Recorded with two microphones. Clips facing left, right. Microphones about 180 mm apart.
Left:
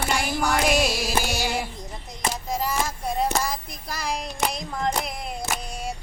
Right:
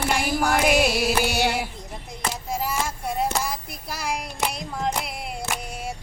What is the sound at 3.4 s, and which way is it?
Child singing, 10° right (ahead or behind).